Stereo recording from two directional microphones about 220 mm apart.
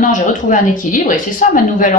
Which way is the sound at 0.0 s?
35° left (ahead or behind).